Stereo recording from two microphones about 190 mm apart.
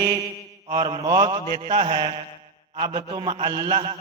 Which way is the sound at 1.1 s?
20° right (ahead or behind).